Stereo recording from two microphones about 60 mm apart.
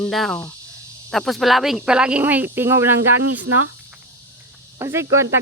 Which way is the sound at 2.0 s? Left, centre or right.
Centre.